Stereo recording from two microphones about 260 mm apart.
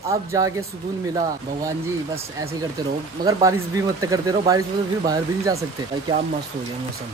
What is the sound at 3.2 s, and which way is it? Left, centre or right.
Speech, centre.